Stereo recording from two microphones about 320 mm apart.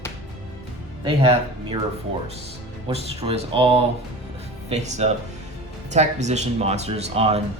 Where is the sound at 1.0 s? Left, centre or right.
Centre.